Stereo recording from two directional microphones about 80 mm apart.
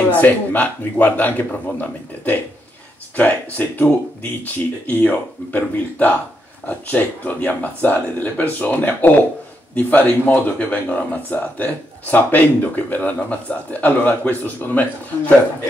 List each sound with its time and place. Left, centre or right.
0.1 s speech: left